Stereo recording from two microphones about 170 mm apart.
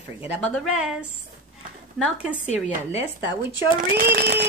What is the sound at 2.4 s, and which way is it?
Speech, 40° left (ahead or behind).